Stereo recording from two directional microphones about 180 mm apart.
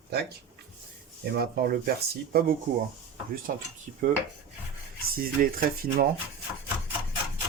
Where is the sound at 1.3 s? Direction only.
55° right (ahead or behind).